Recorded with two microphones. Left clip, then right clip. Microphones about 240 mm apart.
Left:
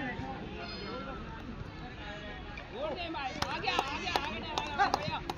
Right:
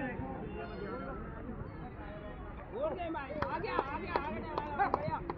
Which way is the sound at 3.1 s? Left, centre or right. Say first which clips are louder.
Left 2 dB; left.